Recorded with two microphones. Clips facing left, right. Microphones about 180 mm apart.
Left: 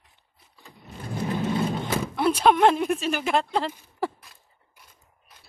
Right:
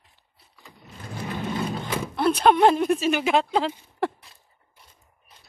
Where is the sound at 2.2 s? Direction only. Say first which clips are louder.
Right 1 dB; 5° left (ahead or behind).